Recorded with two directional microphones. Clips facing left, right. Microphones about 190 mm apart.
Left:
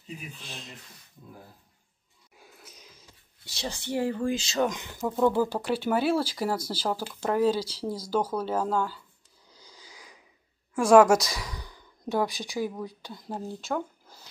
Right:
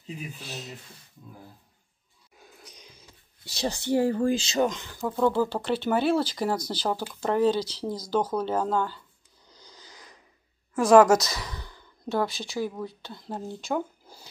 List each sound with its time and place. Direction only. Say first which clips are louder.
0.4 s speech: right 5 dB; 5° right (ahead or behind)
2.3 s a sound: right 1 dB; 5° left (ahead or behind)
3.4 s speech: right 6 dB; 40° right (ahead or behind)
4.6 s speech: right 1 dB; 15° left (ahead or behind)
9.5 s a sound: right 1 dB; 5° left (ahead or behind)
10.8 s speech: right 1 dB; 10° left (ahead or behind)
13.5 s speech: right 2 dB; centre (ahead or behind)